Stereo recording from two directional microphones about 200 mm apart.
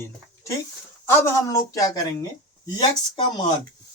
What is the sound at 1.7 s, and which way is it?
Speech, 15° left (ahead or behind).